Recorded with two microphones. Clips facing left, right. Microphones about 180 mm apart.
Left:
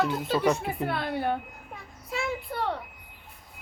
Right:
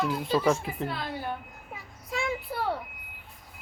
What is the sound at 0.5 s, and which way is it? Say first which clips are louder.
Speech: left 3 dB; 65° left (ahead or behind).